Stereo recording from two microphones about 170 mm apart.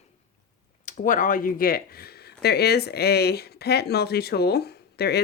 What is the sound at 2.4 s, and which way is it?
Speech, 70° left (ahead or behind).